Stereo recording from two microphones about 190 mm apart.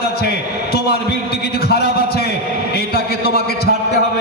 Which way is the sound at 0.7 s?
55° left (ahead or behind).